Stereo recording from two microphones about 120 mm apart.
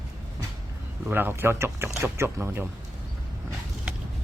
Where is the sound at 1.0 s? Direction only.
20° right (ahead or behind).